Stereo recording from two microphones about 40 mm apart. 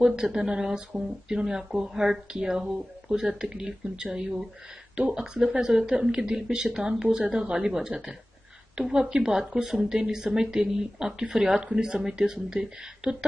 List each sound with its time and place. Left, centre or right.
0.0 s speech: centre
8.8 s speech: centre